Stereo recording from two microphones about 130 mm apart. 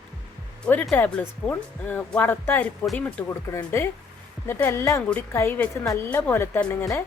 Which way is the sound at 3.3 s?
25° left (ahead or behind).